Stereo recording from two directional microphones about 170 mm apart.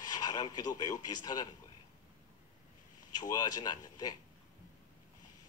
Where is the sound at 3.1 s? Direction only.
25° left (ahead or behind).